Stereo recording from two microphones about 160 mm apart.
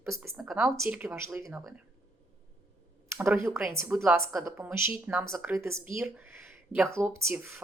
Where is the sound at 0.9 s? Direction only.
15° right (ahead or behind).